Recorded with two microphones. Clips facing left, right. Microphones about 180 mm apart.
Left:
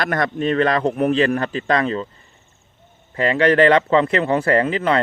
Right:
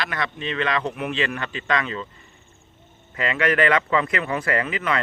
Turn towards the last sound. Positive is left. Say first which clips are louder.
# left 7 dB
turn(degrees=30)  # may be behind; listen again after turning